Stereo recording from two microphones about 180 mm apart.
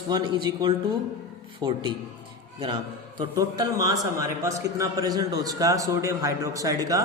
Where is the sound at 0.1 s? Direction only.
20° right (ahead or behind).